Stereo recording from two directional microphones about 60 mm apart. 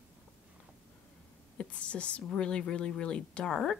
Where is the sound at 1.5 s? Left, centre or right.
Left.